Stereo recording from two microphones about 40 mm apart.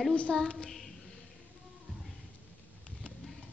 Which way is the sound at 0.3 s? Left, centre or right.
Centre.